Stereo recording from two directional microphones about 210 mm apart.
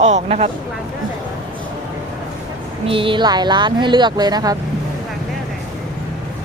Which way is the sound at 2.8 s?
25° right (ahead or behind).